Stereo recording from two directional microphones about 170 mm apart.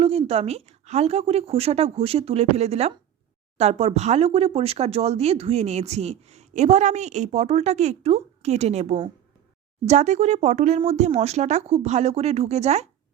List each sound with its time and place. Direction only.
0.0 s speech: 35° right (ahead or behind)